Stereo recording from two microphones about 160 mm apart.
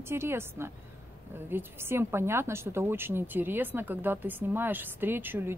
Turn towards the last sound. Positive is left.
turn(degrees=-15)  # may be behind; listen again after turning